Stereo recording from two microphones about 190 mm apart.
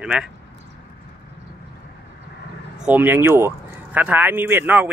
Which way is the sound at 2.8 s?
10° right (ahead or behind).